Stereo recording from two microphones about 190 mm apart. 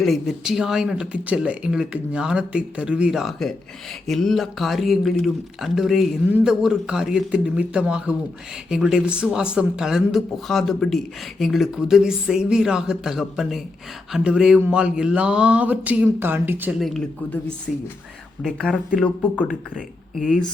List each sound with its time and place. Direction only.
0.0 s speech: centre (ahead or behind)